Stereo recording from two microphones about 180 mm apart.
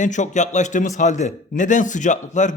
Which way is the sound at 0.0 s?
40° left (ahead or behind).